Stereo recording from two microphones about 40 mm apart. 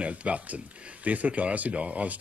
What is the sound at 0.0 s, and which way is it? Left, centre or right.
Speech, right.